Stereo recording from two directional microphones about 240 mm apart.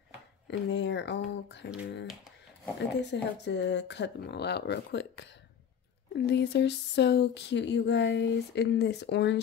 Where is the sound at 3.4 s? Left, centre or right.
Left.